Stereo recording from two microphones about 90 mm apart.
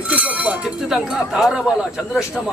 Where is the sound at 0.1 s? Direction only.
15° right (ahead or behind).